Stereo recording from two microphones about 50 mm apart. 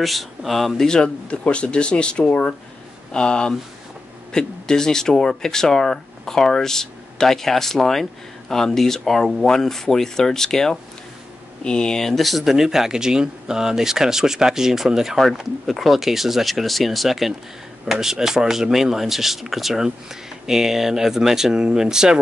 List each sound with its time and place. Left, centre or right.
0.0 s speech: centre
0.8 s speech: centre